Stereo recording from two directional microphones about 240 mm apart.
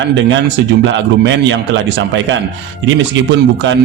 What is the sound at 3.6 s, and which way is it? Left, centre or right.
Speech, right.